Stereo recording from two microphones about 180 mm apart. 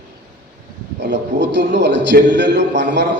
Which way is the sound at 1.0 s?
85° right.